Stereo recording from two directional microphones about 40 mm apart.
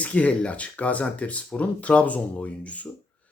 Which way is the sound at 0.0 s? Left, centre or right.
Left.